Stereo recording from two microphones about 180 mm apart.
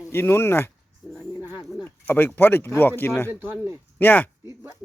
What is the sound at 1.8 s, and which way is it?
Speech, 10° left (ahead or behind).